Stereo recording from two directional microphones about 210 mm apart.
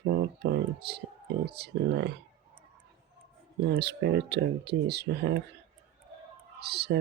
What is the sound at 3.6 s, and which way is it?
Speech, 50° right (ahead or behind).